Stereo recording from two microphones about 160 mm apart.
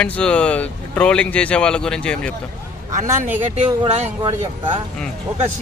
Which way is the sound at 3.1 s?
10° right (ahead or behind).